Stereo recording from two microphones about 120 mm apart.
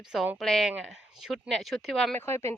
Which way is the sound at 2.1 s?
20° left (ahead or behind).